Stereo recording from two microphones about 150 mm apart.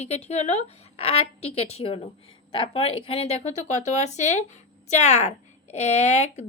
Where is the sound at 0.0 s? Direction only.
45° left (ahead or behind).